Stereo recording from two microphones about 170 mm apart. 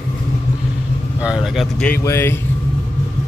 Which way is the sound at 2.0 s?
15° left (ahead or behind).